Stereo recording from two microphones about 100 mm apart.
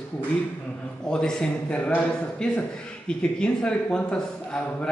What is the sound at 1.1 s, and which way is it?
A man's voice, 5° left (ahead or behind).